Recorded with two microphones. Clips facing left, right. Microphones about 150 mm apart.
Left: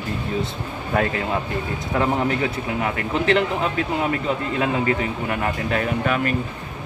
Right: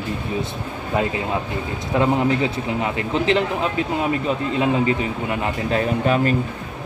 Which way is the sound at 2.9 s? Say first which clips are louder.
Even; 20° right (ahead or behind).